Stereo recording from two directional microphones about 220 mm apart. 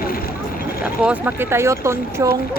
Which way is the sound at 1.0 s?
5° right (ahead or behind).